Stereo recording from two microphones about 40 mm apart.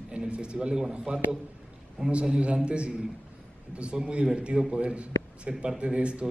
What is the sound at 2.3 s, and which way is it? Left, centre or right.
A man's voice, right.